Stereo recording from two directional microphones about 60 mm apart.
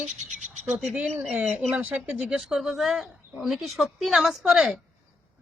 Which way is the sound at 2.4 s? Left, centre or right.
Centre.